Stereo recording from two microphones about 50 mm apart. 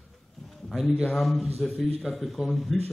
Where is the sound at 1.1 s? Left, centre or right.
Centre.